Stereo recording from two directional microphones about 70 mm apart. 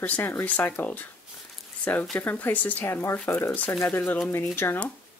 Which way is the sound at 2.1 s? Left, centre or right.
Left.